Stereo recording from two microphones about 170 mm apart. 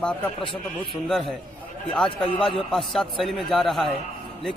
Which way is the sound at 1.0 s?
Centre (ahead or behind).